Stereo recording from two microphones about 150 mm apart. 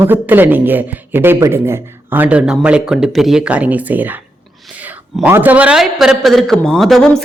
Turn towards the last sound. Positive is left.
turn(degrees=0)  # may be behind; listen again after turning